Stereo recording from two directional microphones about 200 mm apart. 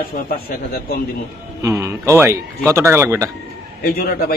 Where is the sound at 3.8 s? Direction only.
50° left (ahead or behind).